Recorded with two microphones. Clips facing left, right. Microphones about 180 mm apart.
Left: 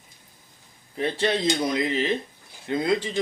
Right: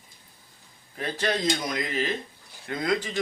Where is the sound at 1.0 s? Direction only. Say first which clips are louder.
Left 3 dB; 25° left (ahead or behind).